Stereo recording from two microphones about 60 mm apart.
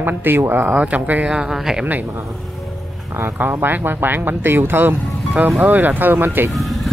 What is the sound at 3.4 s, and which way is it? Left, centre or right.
Speech, right.